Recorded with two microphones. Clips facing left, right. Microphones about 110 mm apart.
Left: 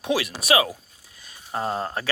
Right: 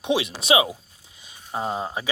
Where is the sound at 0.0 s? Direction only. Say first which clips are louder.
Right 1 dB; 25° right (ahead or behind).